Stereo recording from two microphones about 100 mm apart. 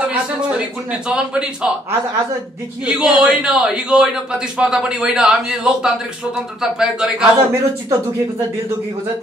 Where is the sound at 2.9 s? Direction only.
10° right (ahead or behind).